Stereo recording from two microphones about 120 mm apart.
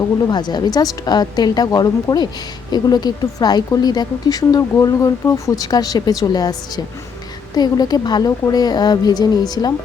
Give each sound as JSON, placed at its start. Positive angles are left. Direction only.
{"t": 0.3, "sound": "a woman's voice", "side_deg": 35}